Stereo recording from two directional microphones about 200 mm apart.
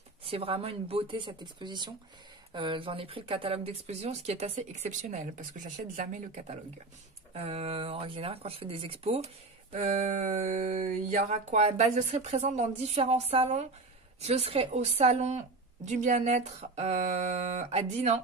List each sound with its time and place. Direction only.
0.2 s speech: 30° right (ahead or behind)